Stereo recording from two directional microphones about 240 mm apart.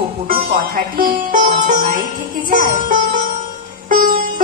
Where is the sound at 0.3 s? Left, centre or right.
Right.